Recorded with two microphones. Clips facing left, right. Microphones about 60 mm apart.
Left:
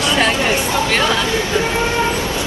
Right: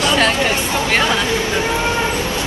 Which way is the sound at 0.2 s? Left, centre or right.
Left.